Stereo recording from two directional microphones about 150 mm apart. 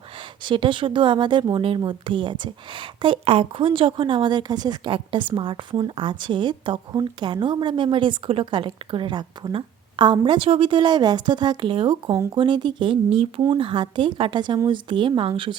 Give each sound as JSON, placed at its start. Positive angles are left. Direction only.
{"t": 0.4, "sound": "a woman's voice", "side_deg": -35}